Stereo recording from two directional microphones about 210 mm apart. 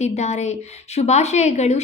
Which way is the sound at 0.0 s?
30° left (ahead or behind).